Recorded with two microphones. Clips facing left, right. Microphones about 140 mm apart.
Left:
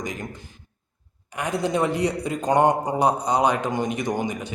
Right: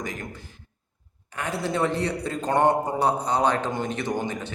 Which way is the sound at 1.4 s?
15° left (ahead or behind).